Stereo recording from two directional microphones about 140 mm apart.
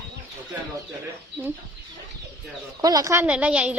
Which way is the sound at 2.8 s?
25° right (ahead or behind).